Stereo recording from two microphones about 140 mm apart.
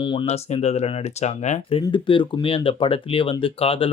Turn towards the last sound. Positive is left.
turn(degrees=40)  # may be behind; listen again after turning